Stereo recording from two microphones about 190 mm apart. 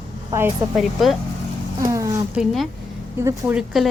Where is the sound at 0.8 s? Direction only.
Centre (ahead or behind).